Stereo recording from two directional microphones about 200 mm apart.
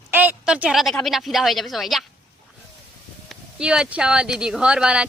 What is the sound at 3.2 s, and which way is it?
Speech, 5° right (ahead or behind).